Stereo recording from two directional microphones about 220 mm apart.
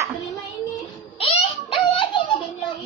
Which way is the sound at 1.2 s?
25° left (ahead or behind).